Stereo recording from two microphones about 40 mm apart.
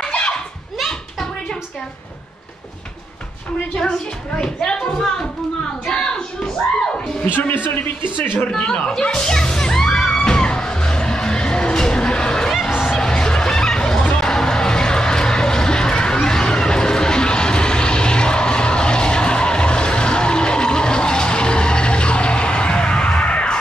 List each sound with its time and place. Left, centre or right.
0.1 s a sound: left
4.4 s speech: left
5.9 s a sound: centre
7.2 s speech: left
8.5 s speech: left
9.0 s music: centre
12.5 s music: centre
13.0 s a sound: centre
14.1 s music: centre